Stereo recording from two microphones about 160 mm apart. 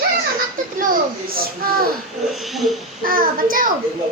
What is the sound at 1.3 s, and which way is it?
Speech, 70° right (ahead or behind).